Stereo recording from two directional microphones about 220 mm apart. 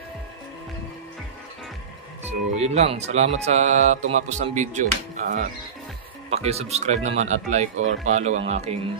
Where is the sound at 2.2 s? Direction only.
30° right (ahead or behind).